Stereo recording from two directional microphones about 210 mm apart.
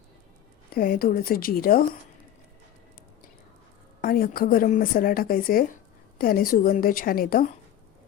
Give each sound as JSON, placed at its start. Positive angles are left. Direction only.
{"t": 0.7, "sound": "speech", "side_deg": 45}
{"t": 4.0, "sound": "speech", "side_deg": 45}